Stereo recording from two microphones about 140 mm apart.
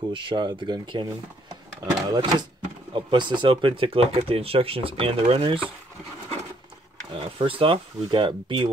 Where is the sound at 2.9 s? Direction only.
35° right (ahead or behind).